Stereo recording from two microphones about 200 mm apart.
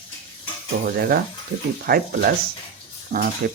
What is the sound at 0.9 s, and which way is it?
Speech, 50° right (ahead or behind).